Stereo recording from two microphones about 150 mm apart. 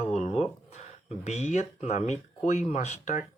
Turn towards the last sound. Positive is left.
turn(degrees=55)  # may be behind; listen again after turning